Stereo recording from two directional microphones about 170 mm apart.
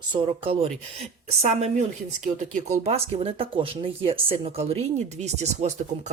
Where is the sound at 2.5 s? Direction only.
40° right (ahead or behind).